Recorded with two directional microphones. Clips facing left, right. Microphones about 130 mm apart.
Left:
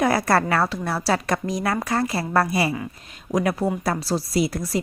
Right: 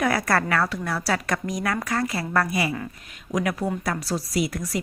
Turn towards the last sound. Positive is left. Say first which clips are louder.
# left 3 dB
turn(degrees=30)  # may be behind; listen again after turning